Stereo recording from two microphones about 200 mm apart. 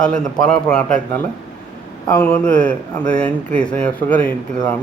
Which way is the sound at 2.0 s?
10° left (ahead or behind).